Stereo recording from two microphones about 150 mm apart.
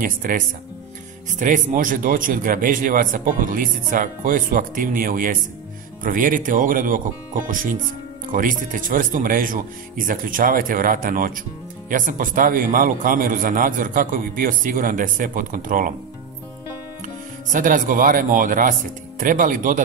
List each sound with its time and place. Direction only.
0.0 s a man's voice: 65° right (ahead or behind)
1.4 s a man's voice: 60° right (ahead or behind)
17.0 s speech: 60° right (ahead or behind)